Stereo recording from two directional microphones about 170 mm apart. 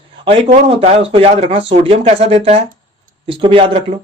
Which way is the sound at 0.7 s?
35° right (ahead or behind).